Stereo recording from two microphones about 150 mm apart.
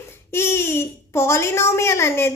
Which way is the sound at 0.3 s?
15° left (ahead or behind).